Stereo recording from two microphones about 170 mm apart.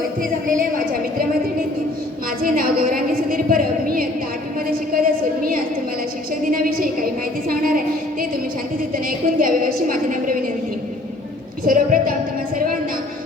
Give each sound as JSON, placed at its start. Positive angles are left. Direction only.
{"t": 2.4, "sound": "a sound", "side_deg": -55}
{"t": 9.0, "sound": "a woman's voice", "side_deg": -55}
{"t": 11.6, "sound": "a woman's voice", "side_deg": -55}